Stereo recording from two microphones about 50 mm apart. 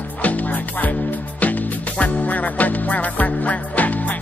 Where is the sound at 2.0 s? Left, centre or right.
Left.